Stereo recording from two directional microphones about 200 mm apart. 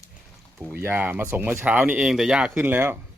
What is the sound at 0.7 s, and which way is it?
Speech, 10° right (ahead or behind).